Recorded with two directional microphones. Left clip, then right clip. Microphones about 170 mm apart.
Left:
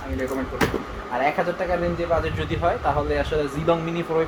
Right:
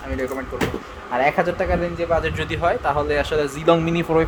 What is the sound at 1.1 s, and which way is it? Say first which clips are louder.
A man's voice: right 4 dB; 60° right (ahead or behind).